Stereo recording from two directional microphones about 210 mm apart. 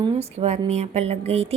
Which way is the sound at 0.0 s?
30° right (ahead or behind).